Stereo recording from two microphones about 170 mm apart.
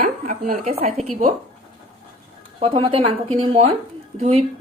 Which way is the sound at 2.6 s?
30° right (ahead or behind).